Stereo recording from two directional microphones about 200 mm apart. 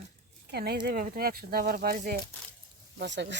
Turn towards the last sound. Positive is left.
turn(degrees=-60)  # may be behind; listen again after turning